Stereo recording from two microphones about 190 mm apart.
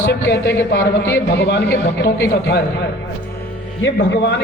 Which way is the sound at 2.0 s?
15° left (ahead or behind).